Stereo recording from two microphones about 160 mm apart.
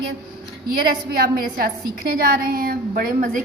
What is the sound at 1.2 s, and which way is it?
A woman's voice, 65° right (ahead or behind).